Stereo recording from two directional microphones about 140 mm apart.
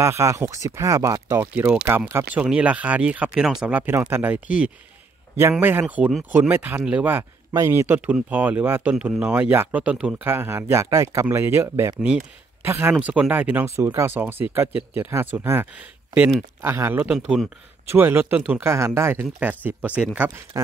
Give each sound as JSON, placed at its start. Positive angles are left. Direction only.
{"t": 0.0, "sound": "speech", "side_deg": -20}
{"t": 1.5, "sound": "speech", "side_deg": -10}
{"t": 17.1, "sound": "speech", "side_deg": -5}
{"t": 20.2, "sound": "speech", "side_deg": -25}